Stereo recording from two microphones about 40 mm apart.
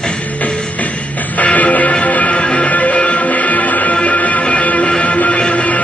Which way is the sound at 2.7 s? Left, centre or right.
Left.